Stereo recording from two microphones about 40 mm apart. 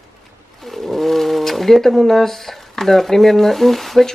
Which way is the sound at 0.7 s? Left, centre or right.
Centre.